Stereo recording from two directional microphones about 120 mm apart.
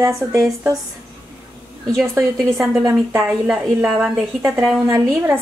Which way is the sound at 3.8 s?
5° right (ahead or behind).